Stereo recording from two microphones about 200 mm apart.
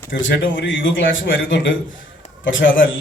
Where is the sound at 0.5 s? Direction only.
65° left (ahead or behind).